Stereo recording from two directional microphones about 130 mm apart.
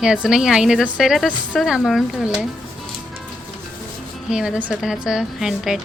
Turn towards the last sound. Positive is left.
turn(degrees=-5)  # may be behind; listen again after turning